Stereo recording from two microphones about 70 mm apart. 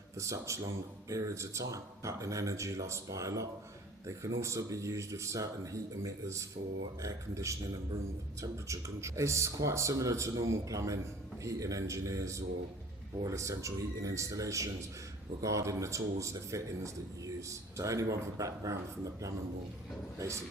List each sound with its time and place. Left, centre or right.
0.2 s speech: right
20.1 s speech: right